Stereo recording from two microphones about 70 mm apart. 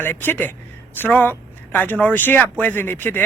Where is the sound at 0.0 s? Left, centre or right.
Left.